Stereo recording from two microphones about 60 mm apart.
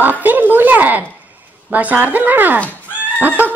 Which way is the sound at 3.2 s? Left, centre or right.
Right.